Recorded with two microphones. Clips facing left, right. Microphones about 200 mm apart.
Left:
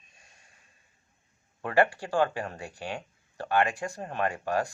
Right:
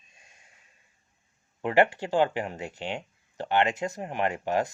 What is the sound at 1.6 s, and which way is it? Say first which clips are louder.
Speech: right 2 dB; 20° right (ahead or behind).